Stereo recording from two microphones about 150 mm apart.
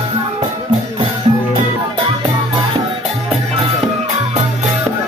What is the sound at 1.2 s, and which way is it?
Music, 40° right (ahead or behind).